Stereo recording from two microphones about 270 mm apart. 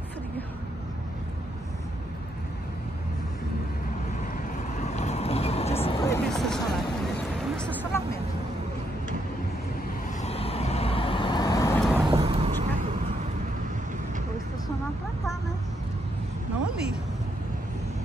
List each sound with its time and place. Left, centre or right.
4.7 s vehicle: left; by 6.8 s centre
7.5 s a sound: centre
10.2 s vehicle: left
11.8 s vehicle: centre
12.1 s vehicle: right